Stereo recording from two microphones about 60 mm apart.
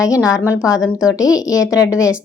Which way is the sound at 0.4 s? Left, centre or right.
Left.